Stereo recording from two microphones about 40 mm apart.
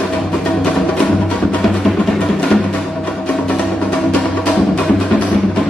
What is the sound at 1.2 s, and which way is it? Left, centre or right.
Music, left.